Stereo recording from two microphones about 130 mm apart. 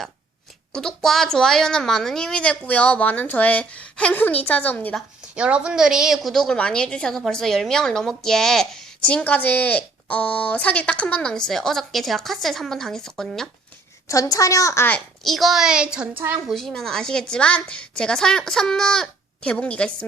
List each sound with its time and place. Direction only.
0.7 s a woman's voice: 5° left (ahead or behind)
5.3 s a woman's voice: 10° right (ahead or behind)
14.1 s a woman's voice: 25° left (ahead or behind)
14.8 s a woman's voice: 5° left (ahead or behind)
16.5 s a woman's voice: 5° left (ahead or behind)